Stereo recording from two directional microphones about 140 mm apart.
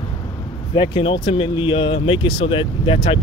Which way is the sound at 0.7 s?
35° left (ahead or behind).